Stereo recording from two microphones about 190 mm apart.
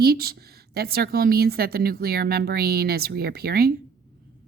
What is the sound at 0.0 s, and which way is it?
A woman's voice, 55° right (ahead or behind).